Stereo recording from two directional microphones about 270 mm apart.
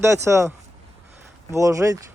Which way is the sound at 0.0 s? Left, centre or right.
Centre.